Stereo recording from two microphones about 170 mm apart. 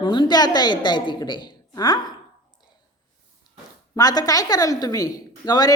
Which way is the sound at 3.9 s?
25° left (ahead or behind).